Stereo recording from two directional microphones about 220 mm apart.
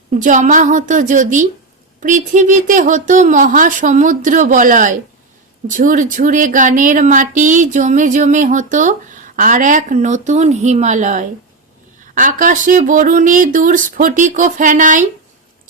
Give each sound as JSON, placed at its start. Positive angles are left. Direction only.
{"t": 0.2, "sound": "speech", "side_deg": -35}